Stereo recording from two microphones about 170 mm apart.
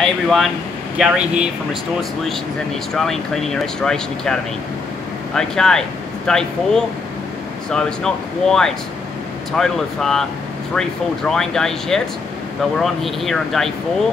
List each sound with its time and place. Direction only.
0.0 s speech: centre (ahead or behind)